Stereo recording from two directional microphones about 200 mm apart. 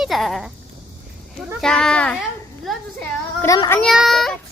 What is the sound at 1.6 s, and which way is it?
Speech, 5° left (ahead or behind).